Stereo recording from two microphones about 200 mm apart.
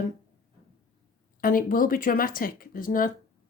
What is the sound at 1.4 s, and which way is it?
Speech, 45° left (ahead or behind).